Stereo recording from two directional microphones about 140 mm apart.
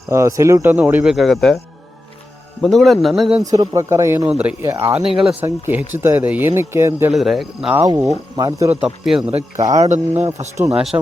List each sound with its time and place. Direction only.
0.1 s speech: 20° right (ahead or behind)
1.1 s a man's voice: centre (ahead or behind)
2.6 s a man's voice: centre (ahead or behind)
3.4 s speech: 25° right (ahead or behind)
4.3 s a man's voice: 10° right (ahead or behind)
7.1 s a man's voice: centre (ahead or behind)
7.8 s speech: 20° right (ahead or behind)
8.8 s a man's voice: 5° right (ahead or behind)
9.6 s speech: 25° right (ahead or behind)
10.8 s a man's voice: 5° right (ahead or behind)